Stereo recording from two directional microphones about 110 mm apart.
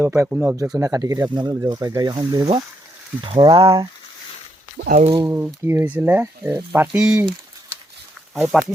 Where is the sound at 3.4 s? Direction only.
35° right (ahead or behind).